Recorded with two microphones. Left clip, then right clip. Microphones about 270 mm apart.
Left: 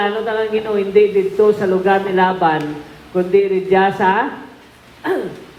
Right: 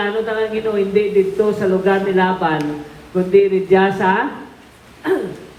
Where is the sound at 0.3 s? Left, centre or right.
Left.